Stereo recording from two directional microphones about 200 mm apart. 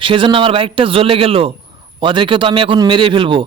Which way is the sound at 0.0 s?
25° right (ahead or behind).